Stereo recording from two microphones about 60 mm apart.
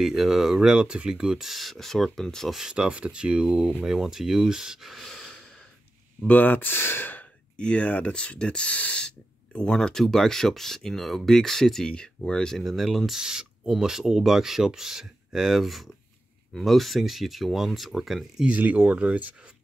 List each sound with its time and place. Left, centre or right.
0.0 s speech: centre
2.6 s speech: centre
6.2 s speech: left
7.5 s speech: centre
12.5 s speech: centre
13.2 s speech: centre
18.4 s speech: right